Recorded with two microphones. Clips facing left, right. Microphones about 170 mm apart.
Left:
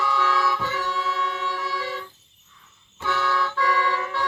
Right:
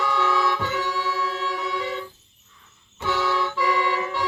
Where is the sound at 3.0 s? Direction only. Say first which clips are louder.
Right 1 dB; 15° right (ahead or behind).